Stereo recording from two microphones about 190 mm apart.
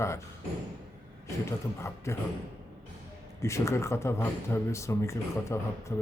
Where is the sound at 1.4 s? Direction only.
15° left (ahead or behind).